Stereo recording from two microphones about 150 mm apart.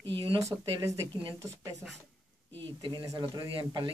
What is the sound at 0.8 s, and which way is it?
Speech, 20° right (ahead or behind).